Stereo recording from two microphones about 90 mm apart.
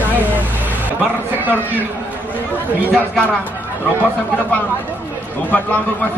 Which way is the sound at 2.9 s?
15° left (ahead or behind).